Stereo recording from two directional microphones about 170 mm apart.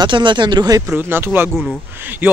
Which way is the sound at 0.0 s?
30° right (ahead or behind).